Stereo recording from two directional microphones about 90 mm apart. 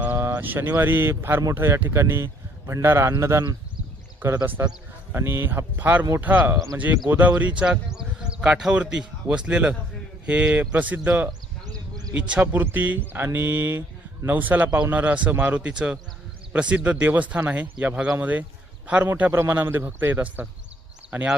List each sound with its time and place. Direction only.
0.0 s a man's voice: 25° right (ahead or behind)
4.2 s a man's voice: 20° right (ahead or behind)
7.6 s speech: 5° right (ahead or behind)
11.6 s a sound: 45° right (ahead or behind)
12.3 s a man's voice: 20° right (ahead or behind)